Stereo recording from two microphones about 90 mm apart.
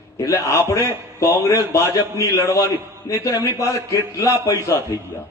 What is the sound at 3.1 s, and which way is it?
Speech, 55° left (ahead or behind).